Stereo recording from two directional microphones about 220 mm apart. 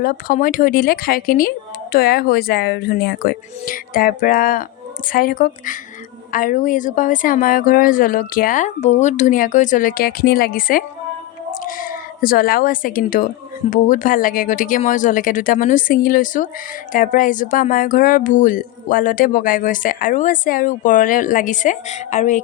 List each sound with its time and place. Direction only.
0.0 s speech: 40° left (ahead or behind)